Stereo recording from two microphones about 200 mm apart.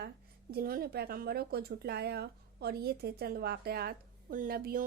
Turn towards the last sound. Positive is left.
turn(degrees=-45)  # may be behind; listen again after turning